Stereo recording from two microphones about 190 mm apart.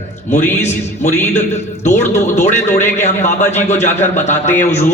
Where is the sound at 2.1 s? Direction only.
35° left (ahead or behind).